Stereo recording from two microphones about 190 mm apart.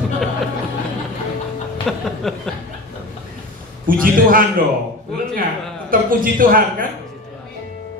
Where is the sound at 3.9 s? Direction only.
50° right (ahead or behind).